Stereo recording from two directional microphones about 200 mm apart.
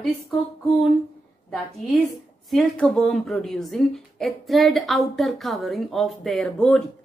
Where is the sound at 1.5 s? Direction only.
5° left (ahead or behind).